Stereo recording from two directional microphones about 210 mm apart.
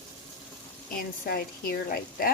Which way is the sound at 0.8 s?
45° left (ahead or behind).